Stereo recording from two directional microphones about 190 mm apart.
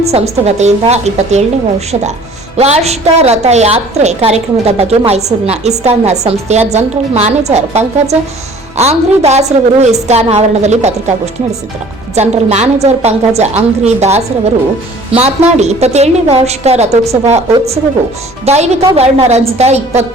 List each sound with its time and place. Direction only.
0.0 s a woman's voice: 35° right (ahead or behind)
2.6 s a woman's voice: 35° right (ahead or behind)
12.1 s a woman's voice: 35° right (ahead or behind)